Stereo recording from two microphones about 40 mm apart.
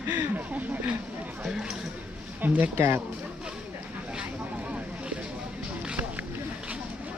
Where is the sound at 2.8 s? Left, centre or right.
Right.